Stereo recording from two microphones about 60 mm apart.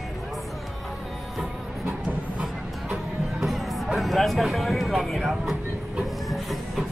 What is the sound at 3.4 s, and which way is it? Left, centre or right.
Music, centre.